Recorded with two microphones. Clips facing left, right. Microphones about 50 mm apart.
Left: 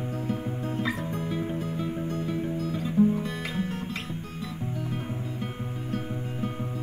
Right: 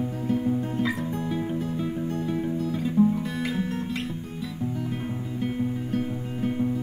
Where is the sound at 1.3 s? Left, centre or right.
Centre.